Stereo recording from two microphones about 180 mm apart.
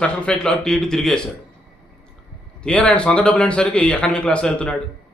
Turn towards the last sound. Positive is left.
turn(degrees=5)  # may be behind; listen again after turning